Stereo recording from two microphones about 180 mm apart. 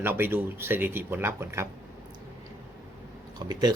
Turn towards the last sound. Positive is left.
turn(degrees=-20)  # may be behind; listen again after turning